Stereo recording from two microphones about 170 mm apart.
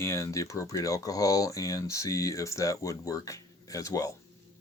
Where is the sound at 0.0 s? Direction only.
15° left (ahead or behind).